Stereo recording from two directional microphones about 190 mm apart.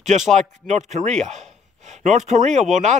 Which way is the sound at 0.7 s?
40° right (ahead or behind).